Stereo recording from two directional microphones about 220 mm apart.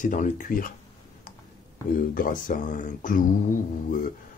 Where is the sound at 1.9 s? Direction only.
40° left (ahead or behind).